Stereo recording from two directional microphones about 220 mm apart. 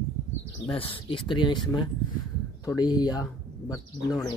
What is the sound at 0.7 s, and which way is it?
Speech, 25° left (ahead or behind).